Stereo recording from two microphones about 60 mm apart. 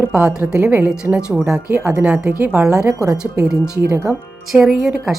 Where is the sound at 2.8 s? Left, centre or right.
Right.